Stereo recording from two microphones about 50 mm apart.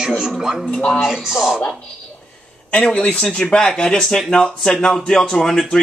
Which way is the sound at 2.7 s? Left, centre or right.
Centre.